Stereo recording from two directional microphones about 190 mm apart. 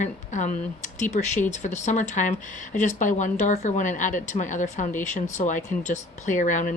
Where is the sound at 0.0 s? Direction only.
40° left (ahead or behind).